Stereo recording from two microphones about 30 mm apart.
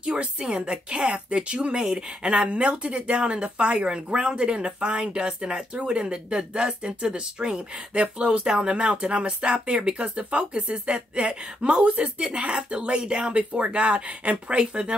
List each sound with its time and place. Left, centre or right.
0.0 s speech: right
1.9 s speech: right
2.3 s speech: right
7.9 s speech: right
14.6 s speech: right